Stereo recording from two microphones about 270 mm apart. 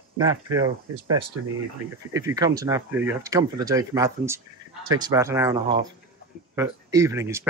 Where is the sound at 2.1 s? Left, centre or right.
Centre.